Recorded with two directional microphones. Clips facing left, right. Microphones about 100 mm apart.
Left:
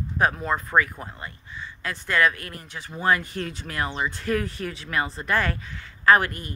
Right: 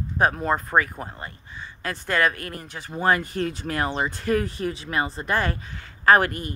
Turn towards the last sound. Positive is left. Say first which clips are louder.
# right 1 dB
turn(degrees=-40)  # may be behind; listen again after turning